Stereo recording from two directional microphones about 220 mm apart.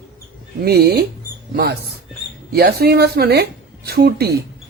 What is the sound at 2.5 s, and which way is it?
Speech, 45° right (ahead or behind).